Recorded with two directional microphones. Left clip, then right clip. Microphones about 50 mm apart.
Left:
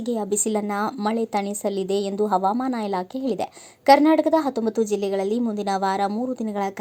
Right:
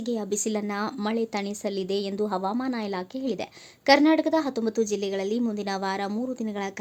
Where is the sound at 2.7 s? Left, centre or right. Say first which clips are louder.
Left 5 dB; left.